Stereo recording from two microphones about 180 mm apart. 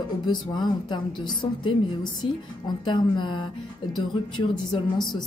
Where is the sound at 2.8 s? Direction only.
25° left (ahead or behind).